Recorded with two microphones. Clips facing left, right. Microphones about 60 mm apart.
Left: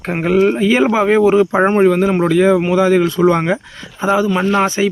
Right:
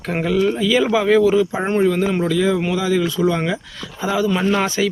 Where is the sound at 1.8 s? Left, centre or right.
Left.